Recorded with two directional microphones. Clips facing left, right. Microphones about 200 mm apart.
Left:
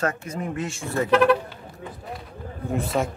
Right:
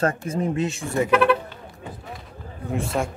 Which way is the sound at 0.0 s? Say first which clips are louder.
Right 4 dB; 30° right (ahead or behind).